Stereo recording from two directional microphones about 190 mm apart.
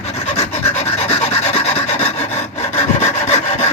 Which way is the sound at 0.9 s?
30° left (ahead or behind).